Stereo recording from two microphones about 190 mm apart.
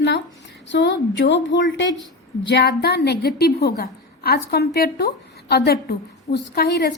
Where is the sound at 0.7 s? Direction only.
70° left (ahead or behind).